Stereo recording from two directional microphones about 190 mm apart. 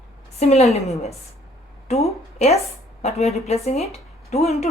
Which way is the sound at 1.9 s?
35° left (ahead or behind).